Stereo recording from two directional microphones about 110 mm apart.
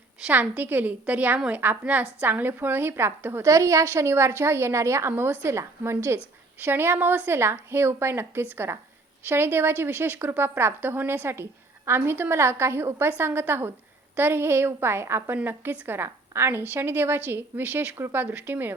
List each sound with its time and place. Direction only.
0.3 s a woman's voice: 15° right (ahead or behind)